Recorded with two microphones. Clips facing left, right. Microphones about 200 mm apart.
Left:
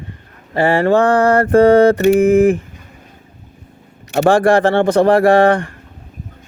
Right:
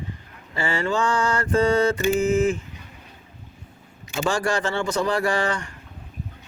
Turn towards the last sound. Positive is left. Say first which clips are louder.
# left 13 dB
turn(degrees=55)  # may be behind; listen again after turning